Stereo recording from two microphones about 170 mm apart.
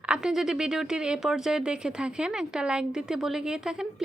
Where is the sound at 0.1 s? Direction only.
5° right (ahead or behind).